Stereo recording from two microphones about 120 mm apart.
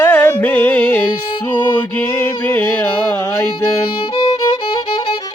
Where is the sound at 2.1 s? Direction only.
15° left (ahead or behind).